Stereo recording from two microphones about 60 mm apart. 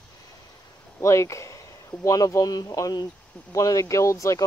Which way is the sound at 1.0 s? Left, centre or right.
Left.